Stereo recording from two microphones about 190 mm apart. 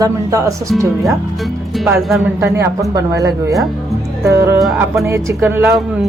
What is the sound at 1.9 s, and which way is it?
Speech, centre (ahead or behind).